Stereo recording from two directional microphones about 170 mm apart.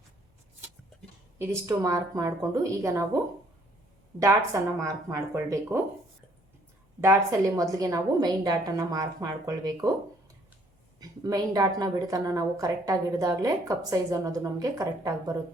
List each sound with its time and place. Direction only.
1.4 s a woman's voice: 15° right (ahead or behind)
4.2 s speech: 20° right (ahead or behind)
7.0 s a woman's voice: 20° right (ahead or behind)
11.0 s a woman's voice: 20° right (ahead or behind)